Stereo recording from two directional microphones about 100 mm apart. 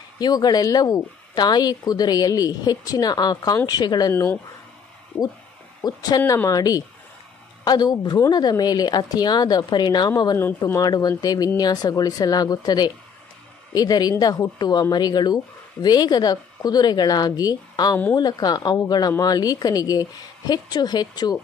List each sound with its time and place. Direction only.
0.2 s speech: 40° left (ahead or behind)
4.1 s speech: 25° left (ahead or behind)
5.8 s a woman's voice: 40° left (ahead or behind)